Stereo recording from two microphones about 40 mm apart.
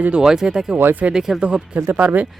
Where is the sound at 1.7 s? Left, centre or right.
Right.